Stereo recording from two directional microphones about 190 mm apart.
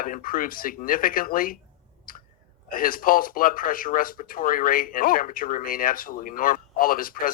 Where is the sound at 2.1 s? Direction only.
45° left (ahead or behind).